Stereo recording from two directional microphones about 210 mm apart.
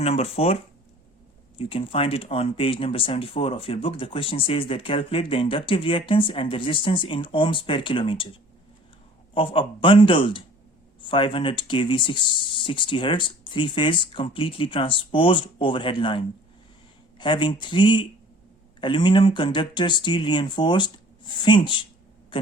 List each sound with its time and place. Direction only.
0.0 s speech: 30° left (ahead or behind)
9.3 s speech: 25° left (ahead or behind)
22.3 s a sound: 25° left (ahead or behind)